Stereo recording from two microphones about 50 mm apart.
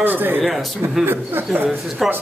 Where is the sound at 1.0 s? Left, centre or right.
Right.